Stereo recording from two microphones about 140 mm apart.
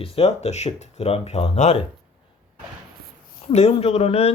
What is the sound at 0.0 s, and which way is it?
Speech, 45° left (ahead or behind).